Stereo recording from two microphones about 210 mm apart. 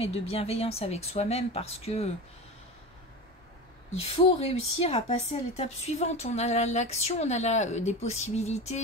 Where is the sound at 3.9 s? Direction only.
30° left (ahead or behind).